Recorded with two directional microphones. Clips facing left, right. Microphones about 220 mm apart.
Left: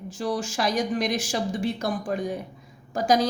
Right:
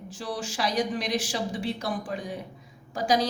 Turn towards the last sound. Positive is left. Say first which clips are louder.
# left 3 dB
turn(degrees=45)  # may be behind; listen again after turning